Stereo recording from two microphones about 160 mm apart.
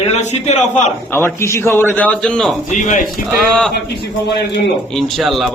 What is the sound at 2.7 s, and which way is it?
Speech, 50° left (ahead or behind).